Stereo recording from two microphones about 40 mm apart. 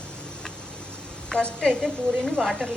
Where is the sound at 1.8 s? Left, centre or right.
Centre.